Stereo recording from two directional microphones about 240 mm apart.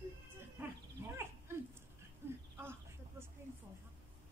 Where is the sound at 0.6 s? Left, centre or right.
Centre.